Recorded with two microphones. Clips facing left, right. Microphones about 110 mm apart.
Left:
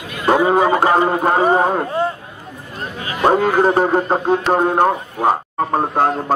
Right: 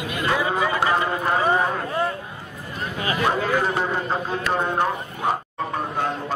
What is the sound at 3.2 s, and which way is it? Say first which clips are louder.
A man's voice: left 10 dB; 45° left (ahead or behind).